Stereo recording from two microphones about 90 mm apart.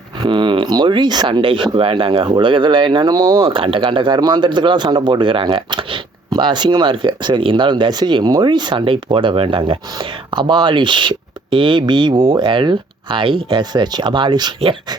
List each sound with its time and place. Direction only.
0.3 s speech: 60° right (ahead or behind)
3.1 s speech: 45° right (ahead or behind)
3.4 s speech: 85° right; by 14.9 s 60° right (ahead or behind)